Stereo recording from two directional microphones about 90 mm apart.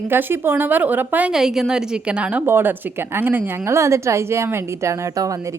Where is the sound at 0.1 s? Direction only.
25° right (ahead or behind).